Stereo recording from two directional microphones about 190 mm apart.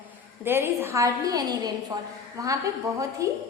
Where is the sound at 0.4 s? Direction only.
10° right (ahead or behind).